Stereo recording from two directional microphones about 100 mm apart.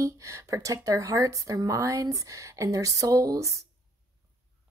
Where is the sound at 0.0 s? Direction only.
30° right (ahead or behind).